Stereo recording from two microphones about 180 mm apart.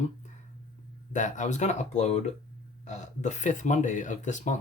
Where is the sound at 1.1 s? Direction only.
45° left (ahead or behind).